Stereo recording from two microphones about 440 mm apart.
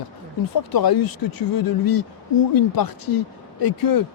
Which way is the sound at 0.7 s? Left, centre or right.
Left.